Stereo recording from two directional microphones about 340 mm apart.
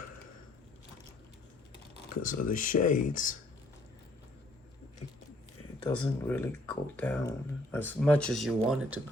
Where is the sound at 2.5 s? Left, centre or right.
Left.